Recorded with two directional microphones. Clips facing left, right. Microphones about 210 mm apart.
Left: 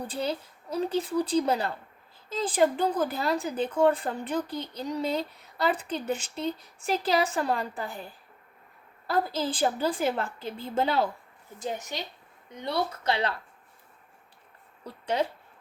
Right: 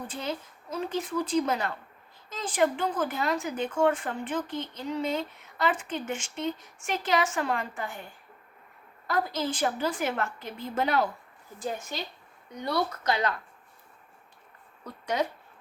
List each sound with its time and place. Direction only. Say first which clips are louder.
0.1 s a woman's voice: left 3 dB; 35° left (ahead or behind)
14.8 s a woman's voice: left 1 dB; 30° left (ahead or behind)